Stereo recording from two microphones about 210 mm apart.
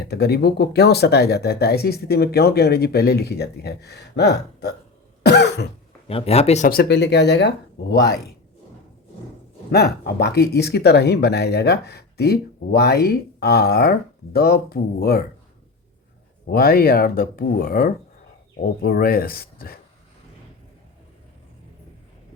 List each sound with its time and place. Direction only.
0.1 s speech: 50° left (ahead or behind)
5.2 s cough: 55° left (ahead or behind)
6.1 s speech: 30° left (ahead or behind)
6.7 s speech: 50° left (ahead or behind)
9.7 s speech: 50° left (ahead or behind)
16.5 s speech: 45° left (ahead or behind)